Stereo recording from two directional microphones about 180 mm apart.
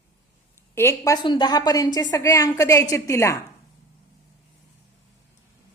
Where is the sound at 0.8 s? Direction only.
15° left (ahead or behind).